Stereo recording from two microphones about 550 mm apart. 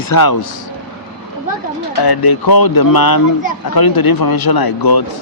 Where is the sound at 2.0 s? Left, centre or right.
Left.